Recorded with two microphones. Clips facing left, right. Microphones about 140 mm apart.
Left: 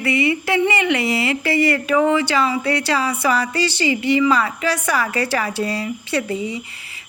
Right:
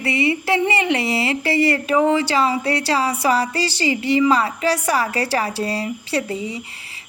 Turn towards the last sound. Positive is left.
turn(degrees=-35)  # may be behind; listen again after turning